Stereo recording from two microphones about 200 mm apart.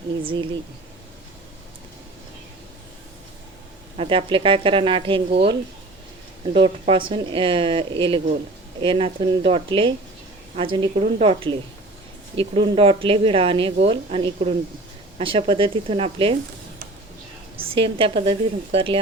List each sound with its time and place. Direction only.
3.9 s speech: 25° right (ahead or behind)
17.6 s speech: 25° right (ahead or behind)